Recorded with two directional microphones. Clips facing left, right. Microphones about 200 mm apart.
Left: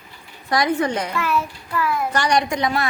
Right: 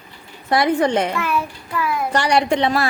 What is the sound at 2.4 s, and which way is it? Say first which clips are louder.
Speech: right 4 dB; 30° right (ahead or behind).